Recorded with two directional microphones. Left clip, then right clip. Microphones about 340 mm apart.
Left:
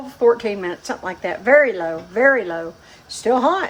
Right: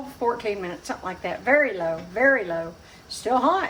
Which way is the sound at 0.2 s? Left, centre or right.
Left.